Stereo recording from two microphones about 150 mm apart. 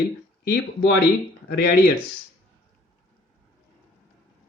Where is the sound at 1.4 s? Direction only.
90° left.